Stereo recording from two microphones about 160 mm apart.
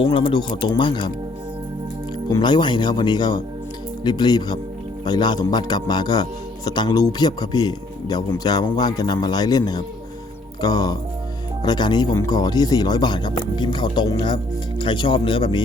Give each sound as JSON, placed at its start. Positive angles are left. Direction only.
{"t": 0.0, "sound": "speech", "side_deg": 30}
{"t": 2.3, "sound": "speech", "side_deg": 30}